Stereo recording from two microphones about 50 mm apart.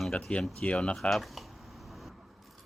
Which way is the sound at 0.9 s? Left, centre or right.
Centre.